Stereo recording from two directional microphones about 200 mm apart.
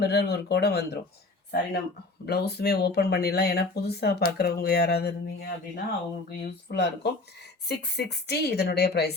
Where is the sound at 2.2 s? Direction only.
55° left (ahead or behind).